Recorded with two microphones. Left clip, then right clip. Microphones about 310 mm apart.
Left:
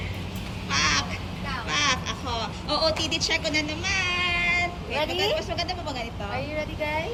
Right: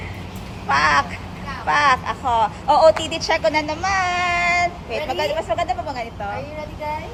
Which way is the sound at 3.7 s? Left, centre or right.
Right.